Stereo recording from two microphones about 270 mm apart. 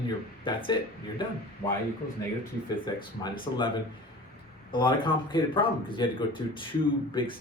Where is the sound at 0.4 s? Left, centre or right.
Centre.